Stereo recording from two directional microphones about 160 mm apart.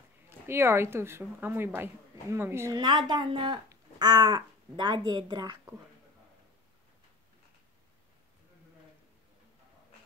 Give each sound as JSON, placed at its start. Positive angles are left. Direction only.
{"t": 0.5, "sound": "a woman's voice", "side_deg": -15}